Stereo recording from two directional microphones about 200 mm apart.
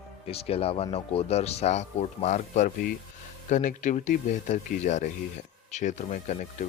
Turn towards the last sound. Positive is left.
turn(degrees=40)  # may be behind; listen again after turning